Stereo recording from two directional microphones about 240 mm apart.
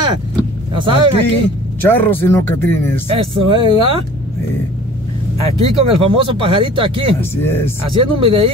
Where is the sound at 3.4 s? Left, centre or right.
Right.